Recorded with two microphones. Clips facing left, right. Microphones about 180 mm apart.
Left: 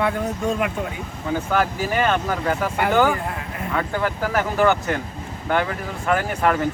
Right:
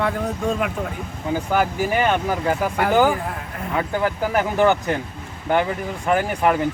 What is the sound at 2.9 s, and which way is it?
Speech, 5° right (ahead or behind).